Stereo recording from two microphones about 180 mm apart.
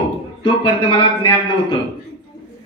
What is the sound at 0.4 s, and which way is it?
Speech, 25° left (ahead or behind).